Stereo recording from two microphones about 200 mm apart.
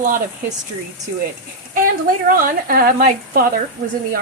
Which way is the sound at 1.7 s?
45° right (ahead or behind).